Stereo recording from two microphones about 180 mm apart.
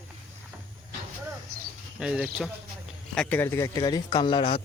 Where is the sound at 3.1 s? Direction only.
5° left (ahead or behind); by 4.6 s 30° left (ahead or behind).